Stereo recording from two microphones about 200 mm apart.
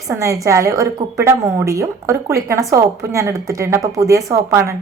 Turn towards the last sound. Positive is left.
turn(degrees=-15)  # may be behind; listen again after turning